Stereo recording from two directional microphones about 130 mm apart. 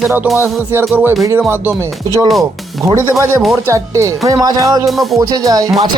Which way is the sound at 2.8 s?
25° right (ahead or behind).